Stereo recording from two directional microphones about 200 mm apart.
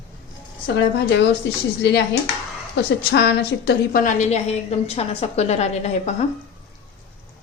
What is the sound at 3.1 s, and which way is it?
A woman's voice, 55° left (ahead or behind).